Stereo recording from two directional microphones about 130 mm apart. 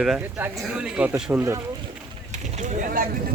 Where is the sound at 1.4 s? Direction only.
20° right (ahead or behind).